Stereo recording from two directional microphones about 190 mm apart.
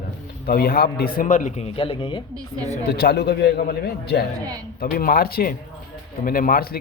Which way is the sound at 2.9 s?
55° left (ahead or behind).